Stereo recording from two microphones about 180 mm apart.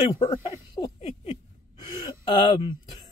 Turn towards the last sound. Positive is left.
turn(degrees=25)  # may be behind; listen again after turning